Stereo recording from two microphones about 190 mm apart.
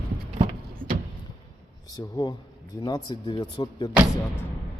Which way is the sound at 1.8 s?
20° left (ahead or behind).